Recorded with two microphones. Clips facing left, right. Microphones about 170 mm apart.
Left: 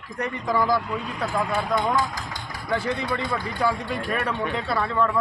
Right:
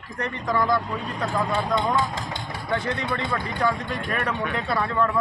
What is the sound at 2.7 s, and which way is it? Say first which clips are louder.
Speech: left 1 dB; 5° left (ahead or behind).